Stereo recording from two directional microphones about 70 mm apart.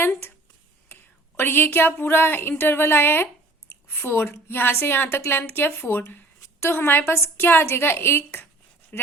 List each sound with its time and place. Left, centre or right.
1.4 s a woman's voice: left